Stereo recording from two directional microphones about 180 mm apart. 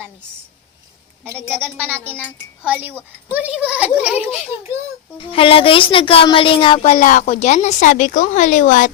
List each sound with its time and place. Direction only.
1.4 s a woman's voice: 5° left (ahead or behind)
2.6 s speech: 10° right (ahead or behind)
4.3 s speech: 35° left (ahead or behind)